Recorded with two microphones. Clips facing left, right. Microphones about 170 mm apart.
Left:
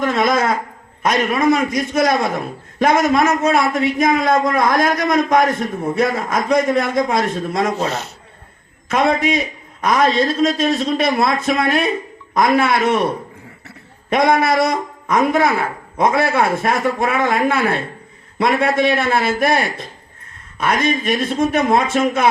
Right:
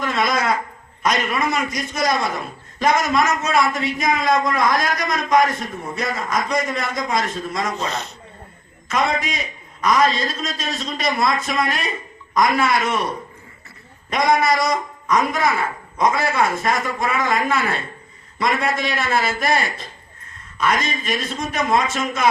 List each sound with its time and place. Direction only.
0.0 s a man's voice: 50° left (ahead or behind)
14.1 s a man's voice: 60° left (ahead or behind)